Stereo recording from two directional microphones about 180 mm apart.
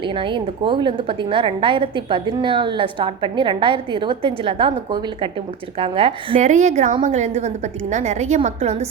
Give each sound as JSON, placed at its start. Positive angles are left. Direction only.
{"t": 0.2, "sound": "a woman's voice", "side_deg": -25}